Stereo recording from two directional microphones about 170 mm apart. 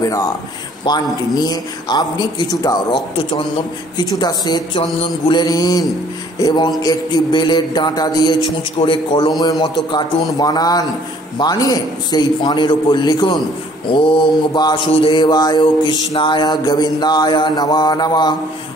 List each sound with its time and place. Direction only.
0.8 s mantra: 25° left (ahead or behind)